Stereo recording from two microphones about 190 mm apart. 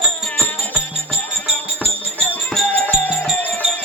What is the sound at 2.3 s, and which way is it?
Music, 5° left (ahead or behind).